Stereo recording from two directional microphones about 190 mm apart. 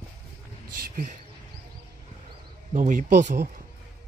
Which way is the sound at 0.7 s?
45° right (ahead or behind).